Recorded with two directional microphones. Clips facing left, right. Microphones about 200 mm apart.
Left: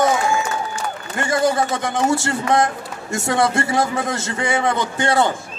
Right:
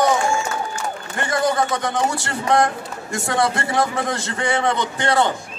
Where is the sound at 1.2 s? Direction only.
25° left (ahead or behind).